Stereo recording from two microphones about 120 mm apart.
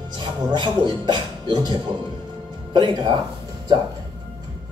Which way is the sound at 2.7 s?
35° right (ahead or behind).